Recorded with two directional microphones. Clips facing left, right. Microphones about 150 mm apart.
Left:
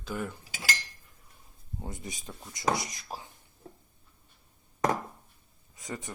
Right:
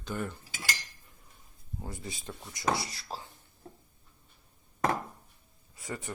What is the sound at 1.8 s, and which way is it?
Speech, 20° left (ahead or behind).